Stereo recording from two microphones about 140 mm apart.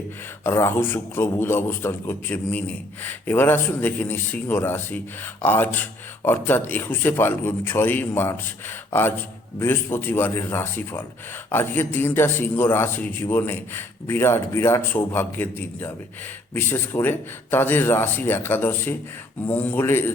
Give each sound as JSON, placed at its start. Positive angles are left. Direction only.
{"t": 0.4, "sound": "a man's voice", "side_deg": 15}